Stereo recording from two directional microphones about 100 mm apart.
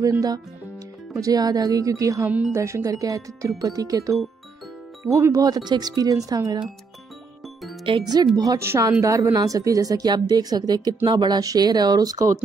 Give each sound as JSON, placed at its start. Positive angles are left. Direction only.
{"t": 1.1, "sound": "speech", "side_deg": -35}
{"t": 2.2, "sound": "speech", "side_deg": -10}
{"t": 2.5, "sound": "speech", "side_deg": -30}
{"t": 8.0, "sound": "speech", "side_deg": -40}
{"t": 8.5, "sound": "speech", "side_deg": -30}